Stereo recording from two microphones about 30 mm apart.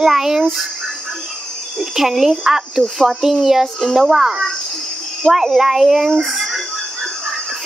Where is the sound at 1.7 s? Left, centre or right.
Centre.